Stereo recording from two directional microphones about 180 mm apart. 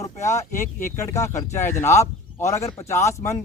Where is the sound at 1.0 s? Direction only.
15° left (ahead or behind).